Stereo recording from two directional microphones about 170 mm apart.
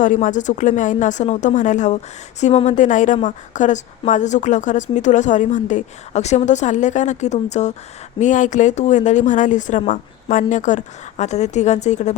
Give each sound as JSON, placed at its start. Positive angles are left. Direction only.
{"t": 0.0, "sound": "speech", "side_deg": 50}